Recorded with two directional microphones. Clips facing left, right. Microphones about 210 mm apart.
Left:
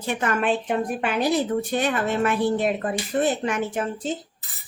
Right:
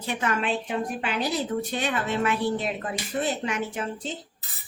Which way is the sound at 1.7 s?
50° left (ahead or behind).